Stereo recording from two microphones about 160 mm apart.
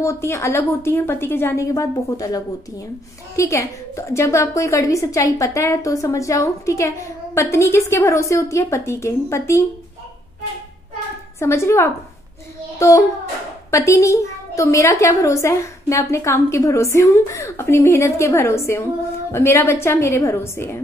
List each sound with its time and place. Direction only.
0.0 s a woman's voice: 15° left (ahead or behind)
11.3 s a woman's voice: 15° left (ahead or behind)
12.7 s child singing: 20° left (ahead or behind)
13.7 s a woman's voice: 20° left (ahead or behind)